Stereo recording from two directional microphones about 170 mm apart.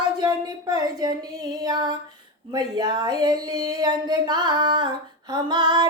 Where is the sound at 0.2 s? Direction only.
25° right (ahead or behind).